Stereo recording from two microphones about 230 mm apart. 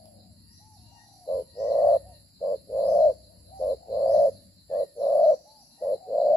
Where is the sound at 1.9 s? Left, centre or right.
Centre.